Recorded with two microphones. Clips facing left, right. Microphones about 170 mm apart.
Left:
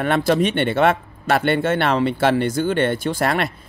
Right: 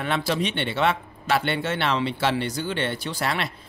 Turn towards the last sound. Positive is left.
turn(degrees=50)  # may be behind; listen again after turning